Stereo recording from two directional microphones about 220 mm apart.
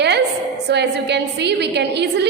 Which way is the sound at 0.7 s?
50° right (ahead or behind).